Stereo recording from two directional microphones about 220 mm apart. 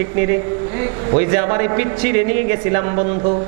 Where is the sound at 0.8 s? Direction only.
20° right (ahead or behind).